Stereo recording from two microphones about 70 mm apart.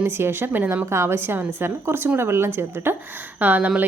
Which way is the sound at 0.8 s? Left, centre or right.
Right.